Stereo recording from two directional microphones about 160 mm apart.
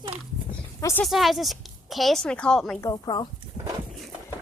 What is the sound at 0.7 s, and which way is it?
Speech, 20° left (ahead or behind).